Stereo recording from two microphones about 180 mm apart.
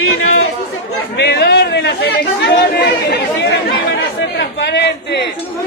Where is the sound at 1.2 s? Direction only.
65° left (ahead or behind).